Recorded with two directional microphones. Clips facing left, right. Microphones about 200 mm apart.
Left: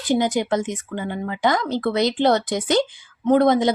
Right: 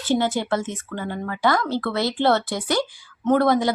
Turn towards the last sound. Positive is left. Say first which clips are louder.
# left 2 dB
turn(degrees=20)  # may be behind; listen again after turning